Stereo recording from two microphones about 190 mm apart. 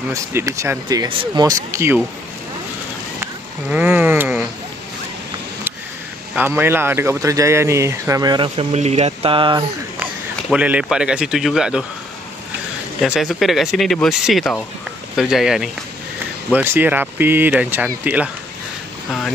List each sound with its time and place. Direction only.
0.1 s speech: 15° right (ahead or behind)
3.7 s a sound: 10° right (ahead or behind)
6.3 s speech: 10° right (ahead or behind)
8.7 s speech: 35° right (ahead or behind)
10.5 s speech: 5° right (ahead or behind)
13.0 s speech: centre (ahead or behind)